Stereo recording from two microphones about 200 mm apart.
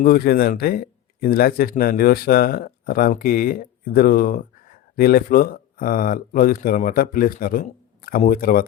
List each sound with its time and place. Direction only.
0.0 s speech: 50° left (ahead or behind)